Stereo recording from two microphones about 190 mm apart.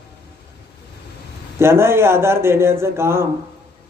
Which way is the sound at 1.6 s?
15° right (ahead or behind).